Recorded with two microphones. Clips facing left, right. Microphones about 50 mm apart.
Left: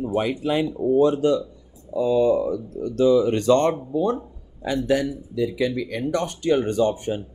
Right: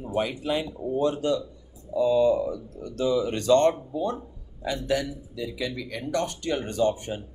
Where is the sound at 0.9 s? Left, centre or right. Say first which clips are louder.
Left 6 dB; left.